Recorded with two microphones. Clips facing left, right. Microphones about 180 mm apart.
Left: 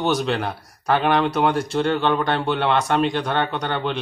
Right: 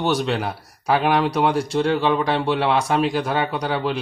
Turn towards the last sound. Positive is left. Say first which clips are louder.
# right 1 dB
turn(degrees=-5)  # may be behind; listen again after turning